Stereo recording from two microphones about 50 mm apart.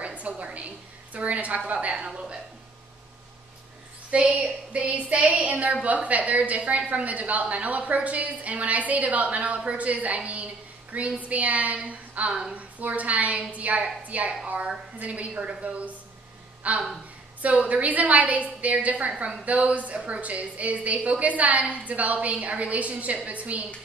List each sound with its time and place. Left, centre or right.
0.0 s a sound: right
1.7 s a woman's voice: right
4.1 s a woman's voice: right